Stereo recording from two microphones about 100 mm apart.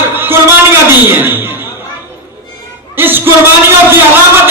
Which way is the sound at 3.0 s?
20° right (ahead or behind).